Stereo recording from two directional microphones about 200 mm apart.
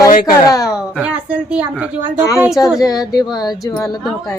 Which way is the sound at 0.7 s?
5° right (ahead or behind).